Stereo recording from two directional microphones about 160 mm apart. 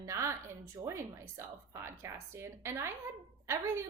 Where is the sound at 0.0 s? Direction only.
20° right (ahead or behind).